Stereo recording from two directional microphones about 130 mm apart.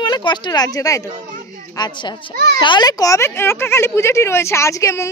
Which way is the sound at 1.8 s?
35° left (ahead or behind).